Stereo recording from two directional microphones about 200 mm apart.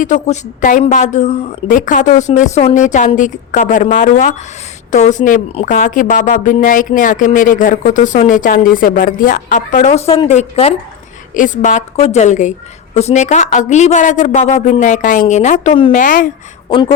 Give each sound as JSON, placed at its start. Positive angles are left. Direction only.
{"t": 0.0, "sound": "a woman's voice", "side_deg": 40}
{"t": 16.6, "sound": "speech", "side_deg": 20}